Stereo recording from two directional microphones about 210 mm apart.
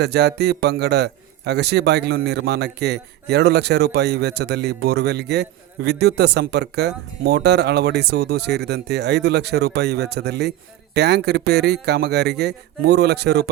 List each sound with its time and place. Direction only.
0.0 s a man's voice: 50° right (ahead or behind)